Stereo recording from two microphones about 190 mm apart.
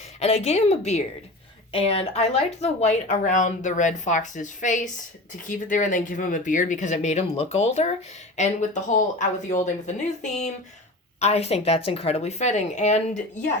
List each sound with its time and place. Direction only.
0.2 s a woman's voice: 35° left (ahead or behind)